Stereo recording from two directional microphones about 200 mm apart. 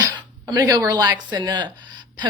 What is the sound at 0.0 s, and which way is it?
A woman's voice, 20° right (ahead or behind).